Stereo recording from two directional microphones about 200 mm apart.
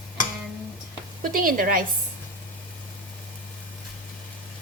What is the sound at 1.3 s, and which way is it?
Speech, 45° right (ahead or behind).